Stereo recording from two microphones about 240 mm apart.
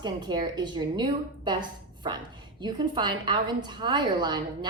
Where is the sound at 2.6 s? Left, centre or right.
Centre.